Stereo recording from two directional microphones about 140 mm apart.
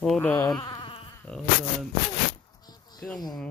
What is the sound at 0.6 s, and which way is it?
Insect, 35° left (ahead or behind).